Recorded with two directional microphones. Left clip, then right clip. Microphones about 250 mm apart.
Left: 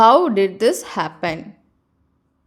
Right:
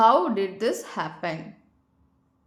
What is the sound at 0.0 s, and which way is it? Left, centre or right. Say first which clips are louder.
A woman's voice: left 7 dB; left.